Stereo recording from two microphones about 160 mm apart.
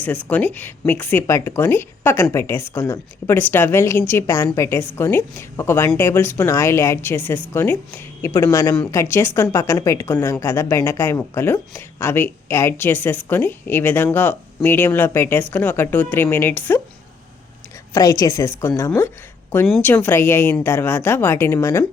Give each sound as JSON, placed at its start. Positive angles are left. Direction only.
{"t": 0.0, "sound": "a woman's voice", "side_deg": 10}
{"t": 17.9, "sound": "a woman's voice", "side_deg": 20}